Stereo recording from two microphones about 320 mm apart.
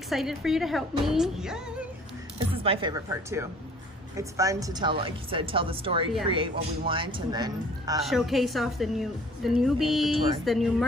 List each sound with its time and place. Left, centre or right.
0.1 s a woman's voice: centre
2.5 s speech: centre
8.0 s a woman's voice: centre